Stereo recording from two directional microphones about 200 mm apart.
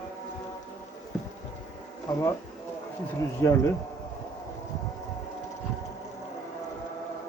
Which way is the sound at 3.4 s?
15° left (ahead or behind).